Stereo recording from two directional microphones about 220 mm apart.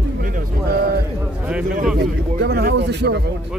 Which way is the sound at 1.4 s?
5° right (ahead or behind).